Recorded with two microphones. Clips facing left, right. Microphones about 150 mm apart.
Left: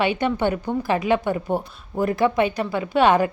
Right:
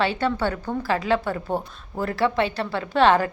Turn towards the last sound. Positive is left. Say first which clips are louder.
# left 1 dB
turn(degrees=15)  # may be behind; listen again after turning